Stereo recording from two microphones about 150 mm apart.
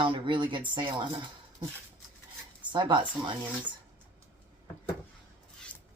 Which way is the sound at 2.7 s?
30° right (ahead or behind).